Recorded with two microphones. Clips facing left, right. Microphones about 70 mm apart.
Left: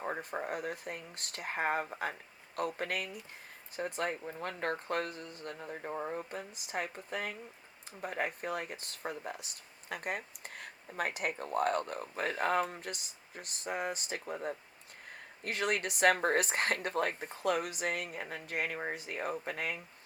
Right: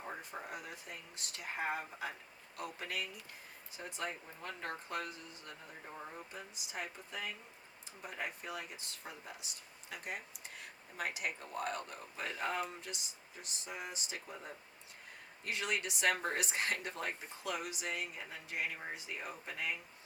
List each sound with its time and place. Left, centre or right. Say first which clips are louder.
0.0 s speech: left 8 dB; left